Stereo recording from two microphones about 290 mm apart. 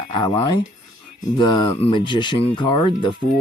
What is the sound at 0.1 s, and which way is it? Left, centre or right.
Speech, centre.